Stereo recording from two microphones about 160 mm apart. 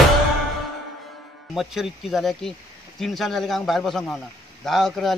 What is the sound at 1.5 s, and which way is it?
Speech, centre (ahead or behind).